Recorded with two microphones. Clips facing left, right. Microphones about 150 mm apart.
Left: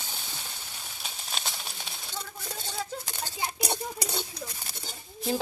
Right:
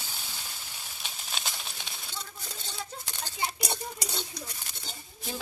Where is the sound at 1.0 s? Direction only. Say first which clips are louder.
Left 1 dB; centre (ahead or behind).